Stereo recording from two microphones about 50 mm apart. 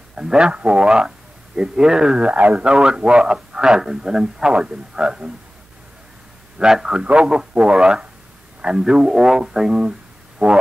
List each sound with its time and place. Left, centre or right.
0.1 s a man's voice: centre
2.3 s speech: right
6.6 s speech: centre
7.0 s speech: right
10.4 s music: right